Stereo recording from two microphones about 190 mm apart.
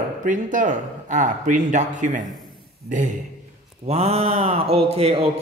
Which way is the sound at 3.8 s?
35° right (ahead or behind).